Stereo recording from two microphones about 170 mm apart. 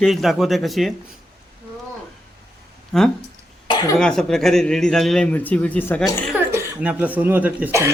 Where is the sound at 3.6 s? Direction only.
25° left (ahead or behind).